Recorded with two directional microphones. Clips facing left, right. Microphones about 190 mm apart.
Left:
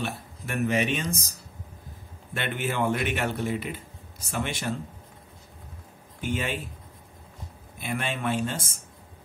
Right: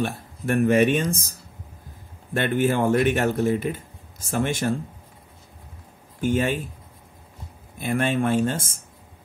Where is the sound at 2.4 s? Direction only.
50° right (ahead or behind).